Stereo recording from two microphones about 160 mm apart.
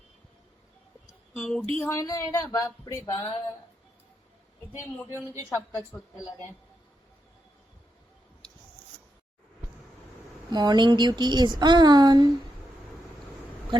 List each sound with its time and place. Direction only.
1.4 s a woman's voice: centre (ahead or behind)
1.7 s speech: 15° left (ahead or behind)
4.8 s a woman's voice: 15° left (ahead or behind)
5.5 s a woman's voice: centre (ahead or behind)
10.5 s speech: 25° right (ahead or behind)